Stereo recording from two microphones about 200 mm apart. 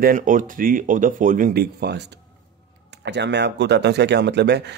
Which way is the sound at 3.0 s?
60° right (ahead or behind).